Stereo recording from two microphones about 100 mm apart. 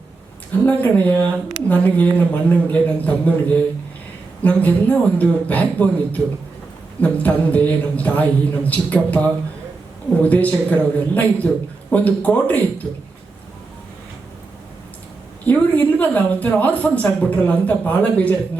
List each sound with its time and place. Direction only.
0.6 s speech: 15° left (ahead or behind)
15.4 s speech: 15° left (ahead or behind)